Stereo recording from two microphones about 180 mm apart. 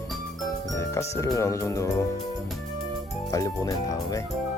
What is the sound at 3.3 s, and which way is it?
Speech, 20° left (ahead or behind).